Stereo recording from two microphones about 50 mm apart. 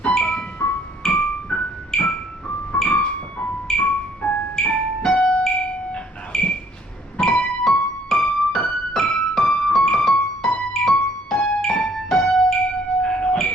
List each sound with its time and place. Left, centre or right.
0.0 s music: left
0.6 s music: left
7.6 s music: centre
9.4 s keyboard: left
9.9 s music: centre
11.3 s piano: centre
12.0 s music: centre